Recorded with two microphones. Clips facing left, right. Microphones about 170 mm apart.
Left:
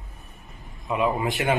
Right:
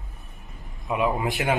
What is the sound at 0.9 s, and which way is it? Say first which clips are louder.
Speech: even; 5° right (ahead or behind).